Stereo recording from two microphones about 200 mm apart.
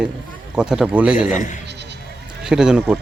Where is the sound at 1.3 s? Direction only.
40° left (ahead or behind).